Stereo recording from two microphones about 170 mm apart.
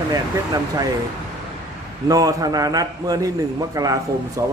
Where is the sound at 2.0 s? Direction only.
20° right (ahead or behind).